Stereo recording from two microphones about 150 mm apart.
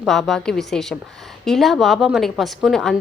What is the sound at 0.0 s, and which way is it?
A woman's voice, centre (ahead or behind).